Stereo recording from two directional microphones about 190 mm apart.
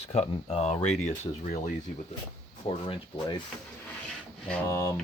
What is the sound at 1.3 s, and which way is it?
Speech, 25° left (ahead or behind).